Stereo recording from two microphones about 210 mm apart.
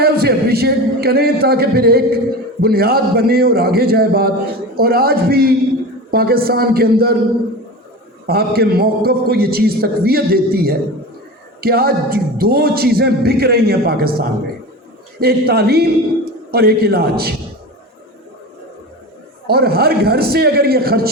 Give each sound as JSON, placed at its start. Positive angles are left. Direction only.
{"t": 0.0, "sound": "a man's voice", "side_deg": -50}
{"t": 8.3, "sound": "a man's voice", "side_deg": -45}
{"t": 19.5, "sound": "a man's voice", "side_deg": -45}